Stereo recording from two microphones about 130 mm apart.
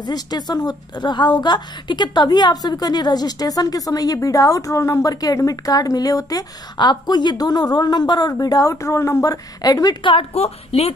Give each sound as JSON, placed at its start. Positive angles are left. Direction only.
{"t": 0.0, "sound": "a woman's voice", "side_deg": 30}
{"t": 10.1, "sound": "speech", "side_deg": 50}